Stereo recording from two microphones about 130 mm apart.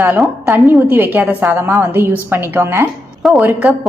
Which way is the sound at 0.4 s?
15° right (ahead or behind).